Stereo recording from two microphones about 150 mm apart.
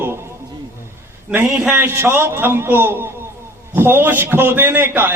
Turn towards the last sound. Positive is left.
turn(degrees=-15)  # may be behind; listen again after turning